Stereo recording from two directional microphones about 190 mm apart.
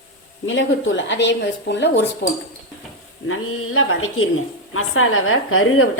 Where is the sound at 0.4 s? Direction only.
85° left; by 2.0 s 65° left (ahead or behind).